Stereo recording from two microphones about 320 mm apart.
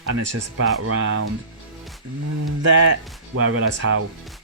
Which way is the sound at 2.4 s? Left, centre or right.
Right.